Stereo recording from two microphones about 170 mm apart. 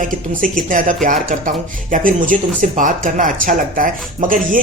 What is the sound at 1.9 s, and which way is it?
Speech, 50° right (ahead or behind).